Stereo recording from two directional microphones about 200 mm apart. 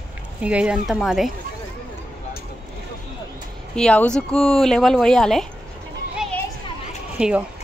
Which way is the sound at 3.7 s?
5° left (ahead or behind).